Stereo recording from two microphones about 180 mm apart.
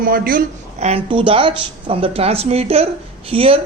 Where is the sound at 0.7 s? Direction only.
35° right (ahead or behind).